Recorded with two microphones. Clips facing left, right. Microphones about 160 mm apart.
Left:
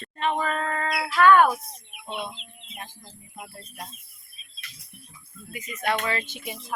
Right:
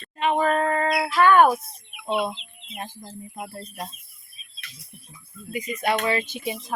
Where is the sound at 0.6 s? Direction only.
20° right (ahead or behind).